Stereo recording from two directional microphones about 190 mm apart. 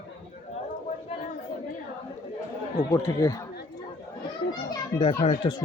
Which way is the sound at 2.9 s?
20° left (ahead or behind).